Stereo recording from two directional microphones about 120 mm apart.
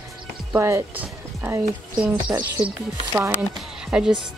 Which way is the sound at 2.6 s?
5° right (ahead or behind).